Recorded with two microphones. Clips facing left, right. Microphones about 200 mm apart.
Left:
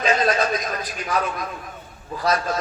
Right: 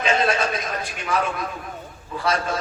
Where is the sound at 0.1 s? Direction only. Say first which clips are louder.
Left 1 dB; 25° right (ahead or behind).